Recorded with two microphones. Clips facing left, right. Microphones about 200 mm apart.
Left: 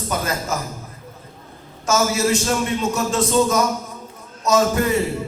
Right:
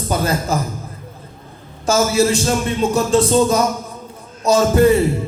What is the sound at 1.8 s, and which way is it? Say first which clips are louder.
Speech: right 4 dB; 30° right (ahead or behind).